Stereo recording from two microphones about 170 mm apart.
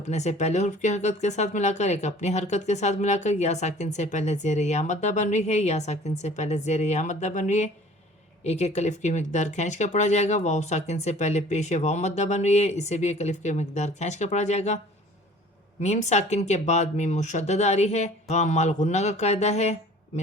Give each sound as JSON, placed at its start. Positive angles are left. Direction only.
{"t": 0.1, "sound": "speech", "side_deg": 40}
{"t": 15.8, "sound": "speech", "side_deg": 40}